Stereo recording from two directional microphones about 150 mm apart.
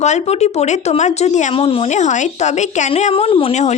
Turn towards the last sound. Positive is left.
turn(degrees=45)  # may be behind; listen again after turning